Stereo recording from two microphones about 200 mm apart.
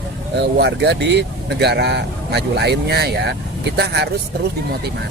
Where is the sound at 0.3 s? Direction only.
60° right (ahead or behind).